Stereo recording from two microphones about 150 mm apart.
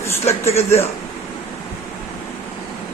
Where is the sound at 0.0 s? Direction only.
15° left (ahead or behind).